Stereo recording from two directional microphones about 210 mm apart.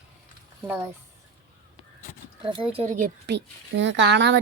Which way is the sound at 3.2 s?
55° right (ahead or behind).